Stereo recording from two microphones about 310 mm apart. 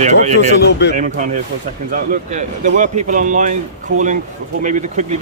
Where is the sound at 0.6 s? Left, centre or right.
Left.